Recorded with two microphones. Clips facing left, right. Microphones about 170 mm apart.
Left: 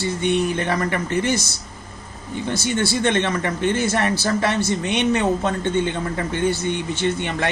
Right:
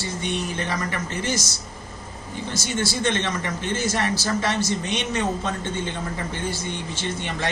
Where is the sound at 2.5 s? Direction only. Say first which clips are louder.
Left 4 dB; 60° left (ahead or behind).